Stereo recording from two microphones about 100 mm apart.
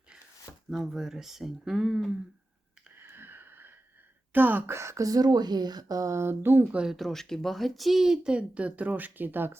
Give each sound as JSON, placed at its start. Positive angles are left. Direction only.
{"t": 0.7, "sound": "speech", "side_deg": -5}
{"t": 3.0, "sound": "a sound", "side_deg": -20}
{"t": 4.3, "sound": "speech", "side_deg": -20}
{"t": 6.7, "sound": "speech", "side_deg": -10}
{"t": 6.9, "sound": "speech", "side_deg": 0}